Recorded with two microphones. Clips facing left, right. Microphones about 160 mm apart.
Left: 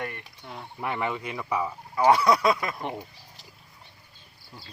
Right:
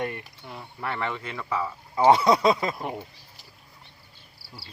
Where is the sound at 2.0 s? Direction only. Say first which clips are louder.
Right 2 dB; 25° right (ahead or behind).